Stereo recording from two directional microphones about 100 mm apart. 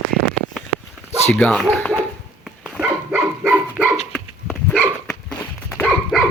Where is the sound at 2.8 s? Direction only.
15° right (ahead or behind).